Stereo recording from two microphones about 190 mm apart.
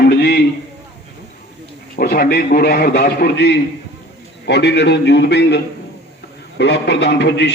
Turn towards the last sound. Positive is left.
turn(degrees=65)  # may be behind; listen again after turning